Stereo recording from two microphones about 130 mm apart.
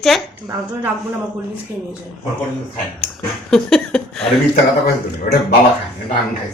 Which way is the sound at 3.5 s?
5° left (ahead or behind).